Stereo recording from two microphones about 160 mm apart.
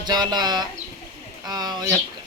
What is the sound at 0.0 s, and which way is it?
A man's voice, 25° right (ahead or behind).